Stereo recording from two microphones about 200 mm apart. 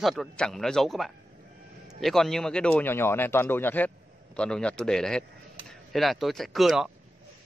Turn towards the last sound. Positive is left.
turn(degrees=0)  # may be behind; listen again after turning